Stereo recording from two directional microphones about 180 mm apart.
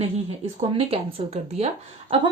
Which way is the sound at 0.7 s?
30° right (ahead or behind).